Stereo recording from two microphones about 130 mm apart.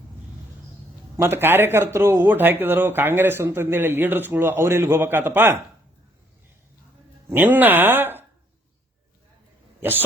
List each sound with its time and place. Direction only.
1.1 s speech: 20° right (ahead or behind)
7.3 s speech: 15° right (ahead or behind)